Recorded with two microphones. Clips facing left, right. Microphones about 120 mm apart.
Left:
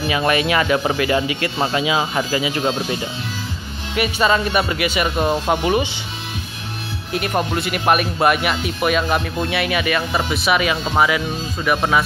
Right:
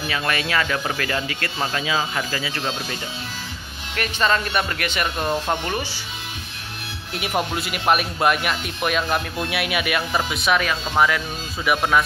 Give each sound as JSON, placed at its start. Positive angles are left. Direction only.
{"t": 0.1, "sound": "speech", "side_deg": 15}
{"t": 3.9, "sound": "speech", "side_deg": 10}
{"t": 7.1, "sound": "speech", "side_deg": -5}